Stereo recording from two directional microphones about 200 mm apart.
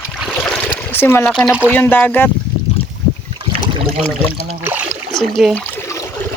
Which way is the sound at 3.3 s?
25° right (ahead or behind).